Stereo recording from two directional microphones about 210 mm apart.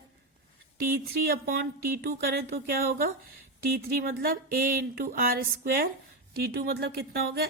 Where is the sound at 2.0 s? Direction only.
45° right (ahead or behind).